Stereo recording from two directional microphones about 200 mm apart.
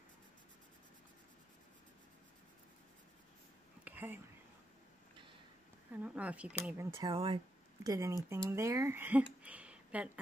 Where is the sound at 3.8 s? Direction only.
10° right (ahead or behind).